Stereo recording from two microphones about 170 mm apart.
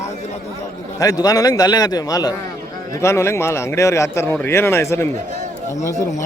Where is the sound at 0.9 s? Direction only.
20° left (ahead or behind).